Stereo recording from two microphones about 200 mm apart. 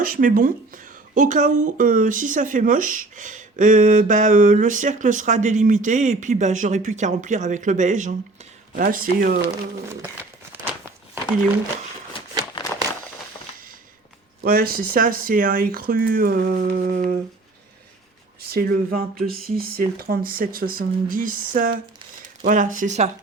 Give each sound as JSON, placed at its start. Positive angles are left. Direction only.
{"t": 0.0, "sound": "speech", "side_deg": -45}
{"t": 10.5, "sound": "crumpling", "side_deg": -10}
{"t": 12.6, "sound": "crumpling", "side_deg": 25}
{"t": 14.4, "sound": "speech", "side_deg": -50}
{"t": 18.4, "sound": "speech", "side_deg": -50}